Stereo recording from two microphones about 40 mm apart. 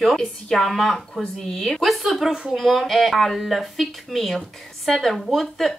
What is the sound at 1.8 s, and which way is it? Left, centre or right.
Speech, centre.